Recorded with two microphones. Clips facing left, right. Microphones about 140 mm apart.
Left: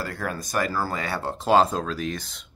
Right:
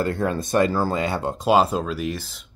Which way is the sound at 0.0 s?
25° right (ahead or behind).